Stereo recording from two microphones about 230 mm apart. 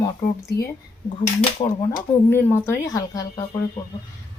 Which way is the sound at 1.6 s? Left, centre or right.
Left.